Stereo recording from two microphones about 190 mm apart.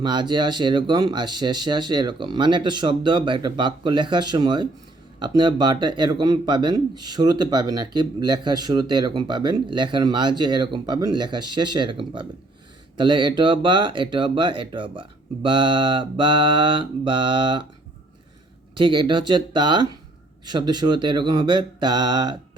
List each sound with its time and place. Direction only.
0.0 s a man's voice: 25° right (ahead or behind)
18.8 s a man's voice: 25° right (ahead or behind)